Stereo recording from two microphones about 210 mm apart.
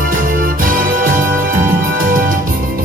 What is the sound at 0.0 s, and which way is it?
Music, 40° right (ahead or behind).